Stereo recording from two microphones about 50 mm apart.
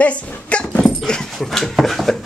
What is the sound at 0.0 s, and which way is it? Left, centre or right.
Dog, left.